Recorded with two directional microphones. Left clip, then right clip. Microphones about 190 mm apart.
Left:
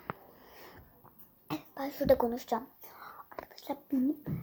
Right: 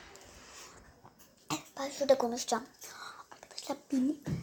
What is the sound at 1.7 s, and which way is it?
Speech, 20° left (ahead or behind).